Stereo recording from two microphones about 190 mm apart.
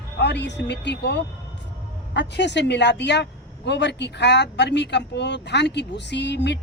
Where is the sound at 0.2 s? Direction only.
65° left (ahead or behind).